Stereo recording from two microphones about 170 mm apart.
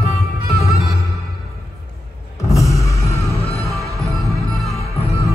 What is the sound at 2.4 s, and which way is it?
Music, 20° left (ahead or behind).